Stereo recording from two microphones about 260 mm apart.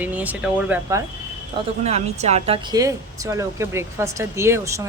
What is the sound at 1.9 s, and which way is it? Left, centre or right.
Speech, right.